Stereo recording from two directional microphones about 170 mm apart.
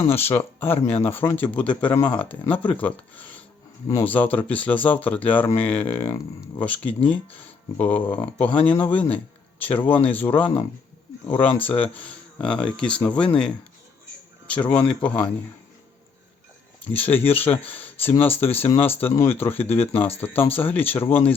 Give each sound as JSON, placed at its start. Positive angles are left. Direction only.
{"t": 0.0, "sound": "speech", "side_deg": 35}
{"t": 0.3, "sound": "speech", "side_deg": 10}
{"t": 14.4, "sound": "speech", "side_deg": 5}
{"t": 16.9, "sound": "speech", "side_deg": 10}